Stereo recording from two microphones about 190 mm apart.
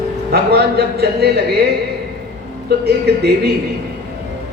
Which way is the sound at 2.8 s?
60° right (ahead or behind).